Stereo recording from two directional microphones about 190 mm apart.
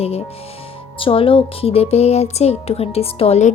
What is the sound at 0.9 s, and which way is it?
Speech, 30° left (ahead or behind).